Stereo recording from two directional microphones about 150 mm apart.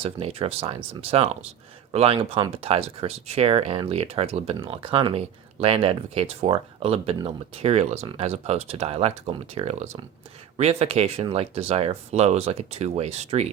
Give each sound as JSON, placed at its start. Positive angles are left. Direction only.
{"t": 0.0, "sound": "speech", "side_deg": -40}